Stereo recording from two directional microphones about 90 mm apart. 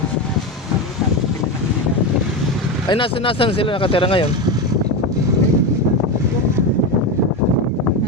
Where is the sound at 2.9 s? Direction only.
70° left (ahead or behind).